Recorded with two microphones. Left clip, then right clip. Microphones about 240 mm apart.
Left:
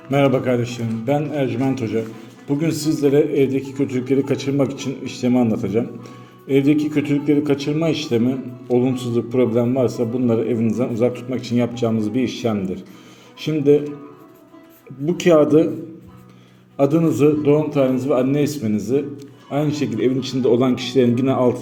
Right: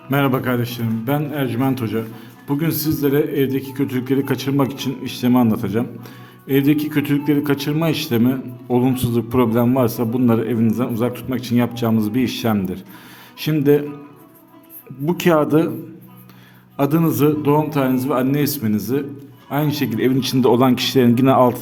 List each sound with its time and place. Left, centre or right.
0.1 s a man's voice: right
15.0 s a man's voice: right
16.7 s a man's voice: right